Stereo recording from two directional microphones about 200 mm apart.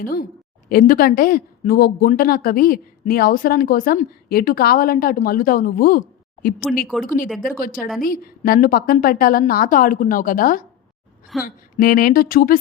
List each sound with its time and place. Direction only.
0.0 s speech: 50° left (ahead or behind)
6.8 s speech: centre (ahead or behind)
7.6 s speech: 45° left (ahead or behind)